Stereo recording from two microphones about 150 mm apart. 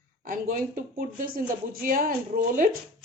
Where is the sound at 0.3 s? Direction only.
70° right (ahead or behind).